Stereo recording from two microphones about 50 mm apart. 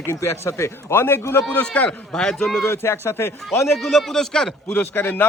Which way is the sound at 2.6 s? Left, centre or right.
Left.